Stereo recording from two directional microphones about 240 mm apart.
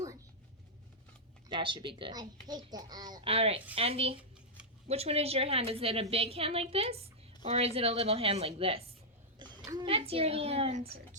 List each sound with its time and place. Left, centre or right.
1.5 s a woman's voice: right